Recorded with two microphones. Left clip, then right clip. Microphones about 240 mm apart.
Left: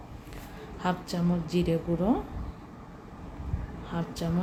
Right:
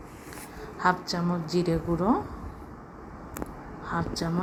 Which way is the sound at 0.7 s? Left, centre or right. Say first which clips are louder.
Right 6 dB; centre.